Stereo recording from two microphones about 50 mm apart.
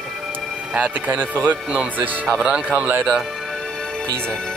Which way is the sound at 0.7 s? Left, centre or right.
Right.